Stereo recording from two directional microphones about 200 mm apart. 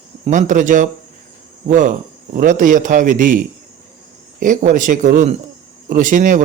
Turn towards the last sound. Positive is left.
turn(degrees=-40)  # may be behind; listen again after turning